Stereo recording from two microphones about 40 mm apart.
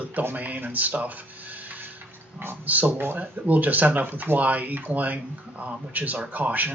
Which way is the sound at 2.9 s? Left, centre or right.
Right.